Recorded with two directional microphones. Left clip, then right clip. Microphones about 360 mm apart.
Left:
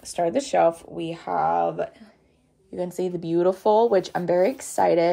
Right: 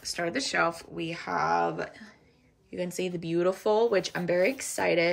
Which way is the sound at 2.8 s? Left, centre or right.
Centre.